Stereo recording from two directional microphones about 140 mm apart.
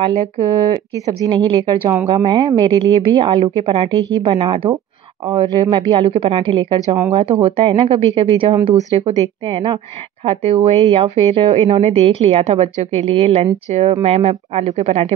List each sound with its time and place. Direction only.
0.0 s speech: 30° right (ahead or behind); by 15.1 s 50° right (ahead or behind)